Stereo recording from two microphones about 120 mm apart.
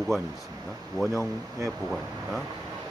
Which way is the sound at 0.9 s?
Centre (ahead or behind).